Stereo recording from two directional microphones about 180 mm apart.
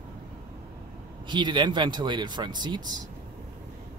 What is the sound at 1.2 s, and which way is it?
Speech, 25° right (ahead or behind).